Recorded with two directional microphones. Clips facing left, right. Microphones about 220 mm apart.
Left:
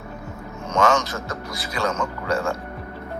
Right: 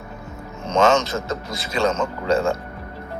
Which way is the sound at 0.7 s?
25° right (ahead or behind).